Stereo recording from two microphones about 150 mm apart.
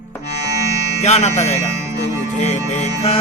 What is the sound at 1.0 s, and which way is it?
Music, 50° left (ahead or behind).